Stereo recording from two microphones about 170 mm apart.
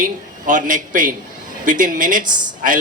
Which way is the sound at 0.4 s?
50° right (ahead or behind).